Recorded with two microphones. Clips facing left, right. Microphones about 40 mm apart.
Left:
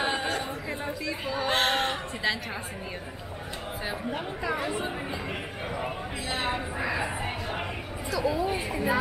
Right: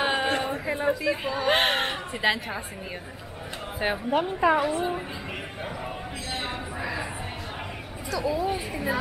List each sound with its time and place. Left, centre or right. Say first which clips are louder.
0.0 s a sound: right 3 dB; centre
0.3 s a sound: right 4 dB; right
0.7 s speech: right 7 dB; centre
3.8 s a woman's voice: right 9 dB; right
4.7 s a woman's voice: right 4 dB; centre
6.4 s speech: left 2 dB; centre
8.1 s speech: right 1 dB; centre